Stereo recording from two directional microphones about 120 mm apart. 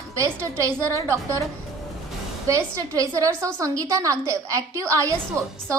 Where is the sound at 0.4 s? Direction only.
25° right (ahead or behind).